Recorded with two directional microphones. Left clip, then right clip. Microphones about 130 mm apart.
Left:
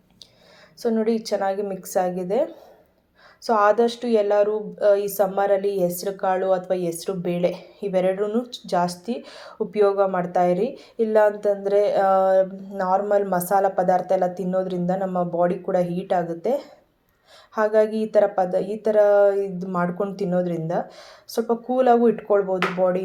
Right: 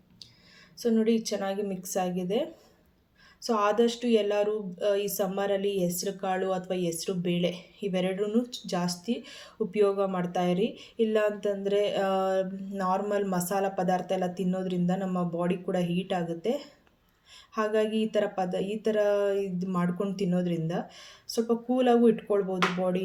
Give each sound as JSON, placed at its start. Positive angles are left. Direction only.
{"t": 0.8, "sound": "speech", "side_deg": -15}